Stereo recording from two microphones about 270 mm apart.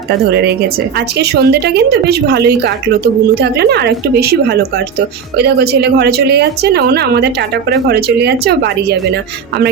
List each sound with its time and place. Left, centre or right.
0.3 s speech: right